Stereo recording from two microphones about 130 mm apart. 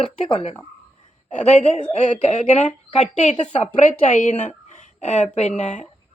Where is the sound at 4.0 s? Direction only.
70° left (ahead or behind).